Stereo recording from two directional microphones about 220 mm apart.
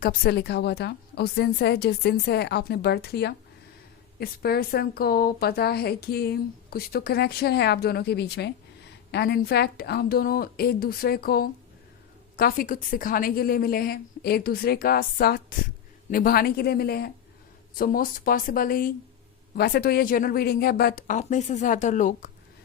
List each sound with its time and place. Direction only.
0.0 s a woman's voice: 40° left (ahead or behind)